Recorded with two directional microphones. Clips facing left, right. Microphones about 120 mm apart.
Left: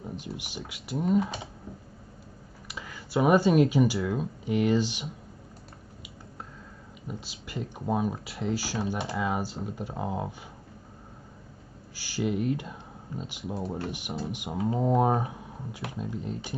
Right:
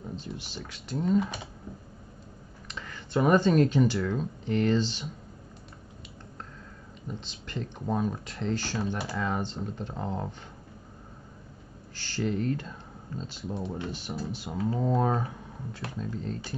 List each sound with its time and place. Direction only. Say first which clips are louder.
0.0 s speech: left 1 dB; 15° left (ahead or behind)
2.7 s speech: even; 10° left (ahead or behind)
7.1 s speech: even; 10° left (ahead or behind)
11.9 s speech: left 1 dB; 10° left (ahead or behind)
13.6 s speech: left 2 dB; 40° left (ahead or behind)
13.8 s speech: left 1 dB; 15° left (ahead or behind)